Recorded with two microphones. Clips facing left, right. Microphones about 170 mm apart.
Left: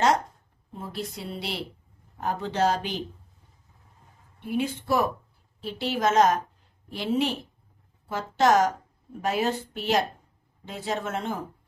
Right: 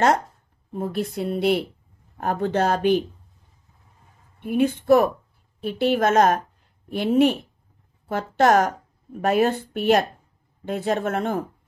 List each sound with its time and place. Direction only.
0.7 s a woman's voice: 55° right (ahead or behind)
4.4 s speech: 55° right (ahead or behind)